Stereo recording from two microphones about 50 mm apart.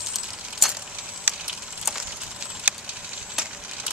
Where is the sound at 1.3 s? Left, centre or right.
Right.